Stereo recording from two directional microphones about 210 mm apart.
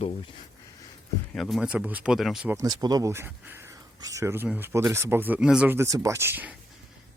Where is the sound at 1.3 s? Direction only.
Centre (ahead or behind).